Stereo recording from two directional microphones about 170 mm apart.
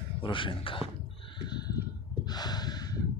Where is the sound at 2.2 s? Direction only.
25° left (ahead or behind).